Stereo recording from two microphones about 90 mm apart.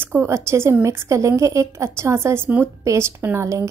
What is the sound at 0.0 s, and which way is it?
A woman's voice, 25° right (ahead or behind).